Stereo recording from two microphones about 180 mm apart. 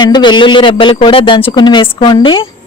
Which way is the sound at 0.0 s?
25° left (ahead or behind).